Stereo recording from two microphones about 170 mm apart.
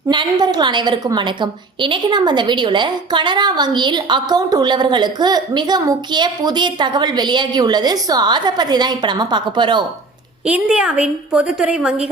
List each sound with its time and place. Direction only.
0.1 s a woman's voice: 25° right (ahead or behind)
10.4 s a woman's voice: 5° right (ahead or behind)